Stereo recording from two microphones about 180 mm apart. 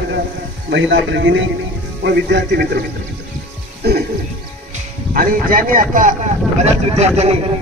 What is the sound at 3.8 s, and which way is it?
Speech, 60° right (ahead or behind).